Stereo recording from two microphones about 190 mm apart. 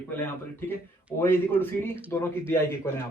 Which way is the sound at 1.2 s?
10° left (ahead or behind).